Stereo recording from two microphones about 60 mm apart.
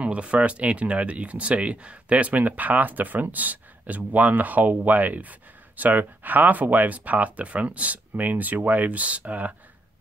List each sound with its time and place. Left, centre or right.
0.0 s speech: right